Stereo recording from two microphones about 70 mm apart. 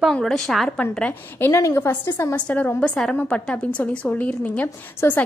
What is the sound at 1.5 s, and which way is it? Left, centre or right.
Speech, left.